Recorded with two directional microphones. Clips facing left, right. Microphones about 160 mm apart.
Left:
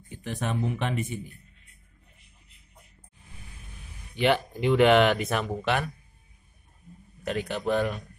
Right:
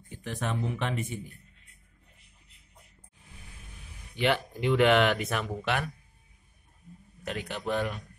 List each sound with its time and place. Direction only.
0.3 s speech: 10° left (ahead or behind)
4.2 s speech: 20° left (ahead or behind)
7.2 s a man's voice: 40° left (ahead or behind)